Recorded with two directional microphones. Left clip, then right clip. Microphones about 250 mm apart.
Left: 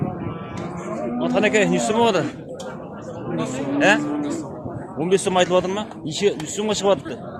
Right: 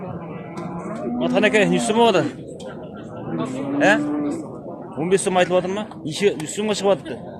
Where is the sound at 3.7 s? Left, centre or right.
Centre.